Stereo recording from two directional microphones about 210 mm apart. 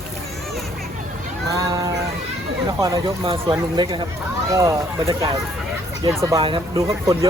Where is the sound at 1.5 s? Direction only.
15° right (ahead or behind).